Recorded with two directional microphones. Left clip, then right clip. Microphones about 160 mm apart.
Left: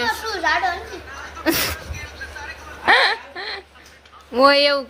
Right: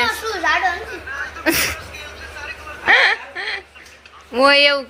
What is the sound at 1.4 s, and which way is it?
Speech, 15° left (ahead or behind).